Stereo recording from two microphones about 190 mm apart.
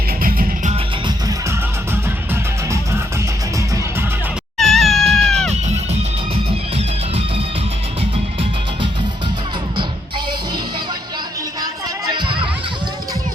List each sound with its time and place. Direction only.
0.2 s music: 50° right (ahead or behind)
2.3 s music: 15° right (ahead or behind)
4.6 s cat: centre (ahead or behind)
6.7 s music: 30° right (ahead or behind)
11.6 s music: 20° right (ahead or behind)